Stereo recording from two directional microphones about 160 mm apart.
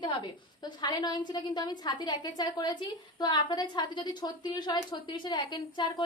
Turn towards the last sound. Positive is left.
turn(degrees=30)  # may be behind; listen again after turning